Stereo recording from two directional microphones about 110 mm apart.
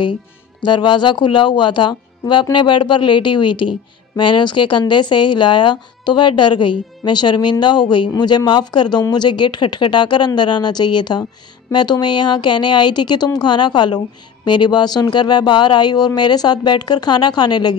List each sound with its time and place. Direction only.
0.7 s speech: 45° left (ahead or behind)